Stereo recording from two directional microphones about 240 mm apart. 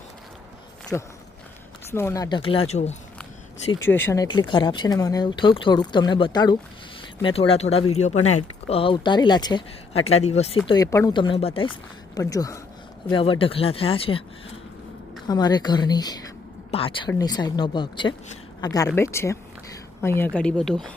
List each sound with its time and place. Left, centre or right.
0.9 s speech: centre; by 2.9 s left
3.7 s speech: centre; by 10.6 s left
10.7 s speech: centre
15.3 s speech: centre